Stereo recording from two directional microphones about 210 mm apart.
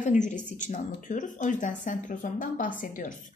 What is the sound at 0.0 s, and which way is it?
A woman's voice, 35° left (ahead or behind).